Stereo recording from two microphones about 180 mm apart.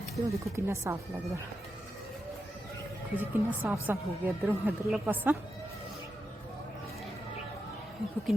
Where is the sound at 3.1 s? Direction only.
10° right (ahead or behind).